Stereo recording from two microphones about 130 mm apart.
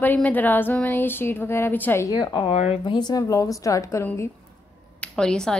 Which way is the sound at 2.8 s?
35° left (ahead or behind).